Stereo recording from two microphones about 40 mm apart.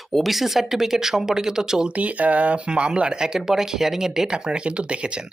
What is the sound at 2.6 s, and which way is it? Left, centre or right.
Speech, right.